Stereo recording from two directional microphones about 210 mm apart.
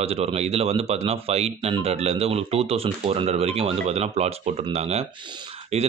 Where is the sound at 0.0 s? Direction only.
30° right (ahead or behind).